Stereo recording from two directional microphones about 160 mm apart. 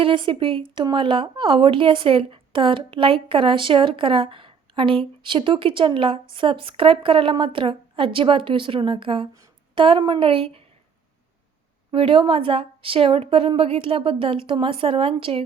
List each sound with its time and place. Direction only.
0.0 s speech: 30° right (ahead or behind)
11.9 s speech: 35° right (ahead or behind)